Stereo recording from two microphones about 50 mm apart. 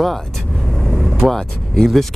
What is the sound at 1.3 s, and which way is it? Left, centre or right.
Speech, centre.